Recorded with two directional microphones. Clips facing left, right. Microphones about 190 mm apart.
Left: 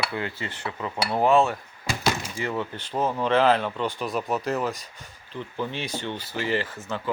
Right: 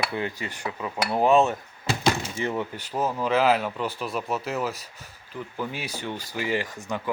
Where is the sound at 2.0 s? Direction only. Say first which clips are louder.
Right 2 dB; 20° right (ahead or behind).